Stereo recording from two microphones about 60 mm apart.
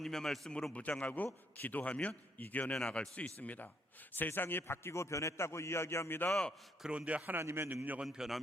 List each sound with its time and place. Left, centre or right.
0.0 s a man's voice: centre
0.7 s a man's voice: left
2.7 s a man's voice: centre; by 6.3 s left
6.8 s a man's voice: right
7.3 s a man's voice: right
7.7 s a man's voice: right
8.0 s a man's voice: centre